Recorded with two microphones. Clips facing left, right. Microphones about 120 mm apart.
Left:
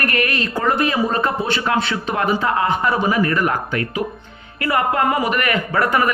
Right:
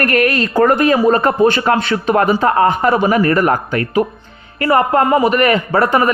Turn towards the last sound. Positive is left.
turn(degrees=-30)  # may be behind; listen again after turning